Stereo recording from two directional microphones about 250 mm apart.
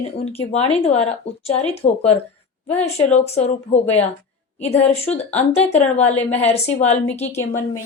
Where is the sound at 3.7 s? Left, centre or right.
Left.